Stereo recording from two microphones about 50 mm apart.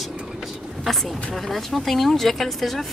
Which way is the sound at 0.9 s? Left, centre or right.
Centre.